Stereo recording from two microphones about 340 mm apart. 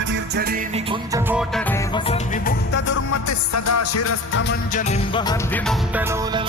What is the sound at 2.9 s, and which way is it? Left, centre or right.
Music, left.